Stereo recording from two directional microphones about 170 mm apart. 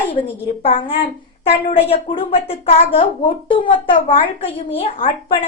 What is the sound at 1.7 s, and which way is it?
A woman's voice, 35° left (ahead or behind).